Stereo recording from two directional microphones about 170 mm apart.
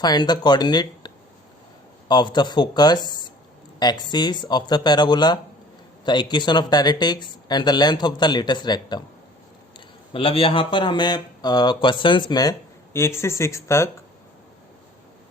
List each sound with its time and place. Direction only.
0.0 s speech: 25° left (ahead or behind)